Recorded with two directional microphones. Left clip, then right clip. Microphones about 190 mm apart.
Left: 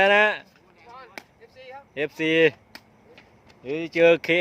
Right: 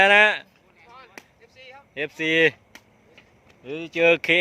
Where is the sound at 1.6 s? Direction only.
45° left (ahead or behind).